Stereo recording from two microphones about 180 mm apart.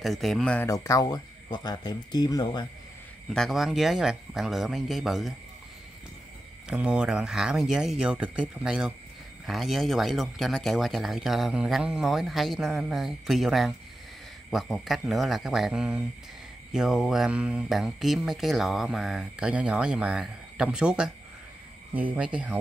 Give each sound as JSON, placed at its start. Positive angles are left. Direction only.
{"t": 0.0, "sound": "speech", "side_deg": 0}
{"t": 0.7, "sound": "speech", "side_deg": 20}
{"t": 3.3, "sound": "speech", "side_deg": 0}
{"t": 6.7, "sound": "speech", "side_deg": -5}